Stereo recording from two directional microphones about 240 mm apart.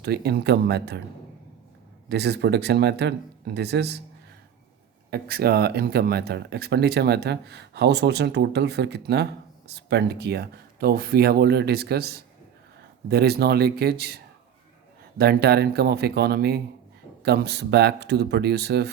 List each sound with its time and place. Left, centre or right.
0.0 s speech: right
2.0 s speech: right
5.1 s speech: right
15.2 s speech: right